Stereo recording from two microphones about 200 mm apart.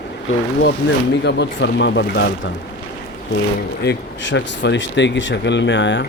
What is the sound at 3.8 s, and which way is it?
Speech, 60° left (ahead or behind).